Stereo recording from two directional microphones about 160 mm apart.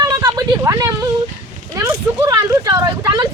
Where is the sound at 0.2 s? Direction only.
20° right (ahead or behind).